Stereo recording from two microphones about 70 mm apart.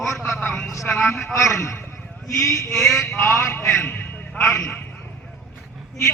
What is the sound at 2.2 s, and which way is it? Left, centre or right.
Speech, left.